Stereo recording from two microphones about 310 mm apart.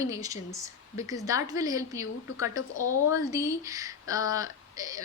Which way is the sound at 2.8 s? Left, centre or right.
Left.